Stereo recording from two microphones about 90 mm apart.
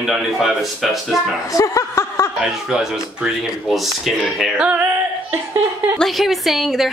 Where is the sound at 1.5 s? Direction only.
35° left (ahead or behind).